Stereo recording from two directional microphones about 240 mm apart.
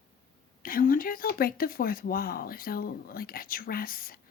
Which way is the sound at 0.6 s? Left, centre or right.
Left.